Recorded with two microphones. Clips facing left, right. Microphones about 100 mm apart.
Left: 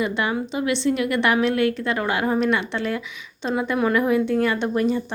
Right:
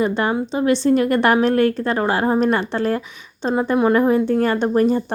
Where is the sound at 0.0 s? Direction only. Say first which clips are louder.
Right 4 dB; 35° right (ahead or behind).